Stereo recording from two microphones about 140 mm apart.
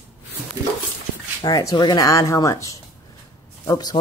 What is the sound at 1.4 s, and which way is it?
Speech, 25° left (ahead or behind).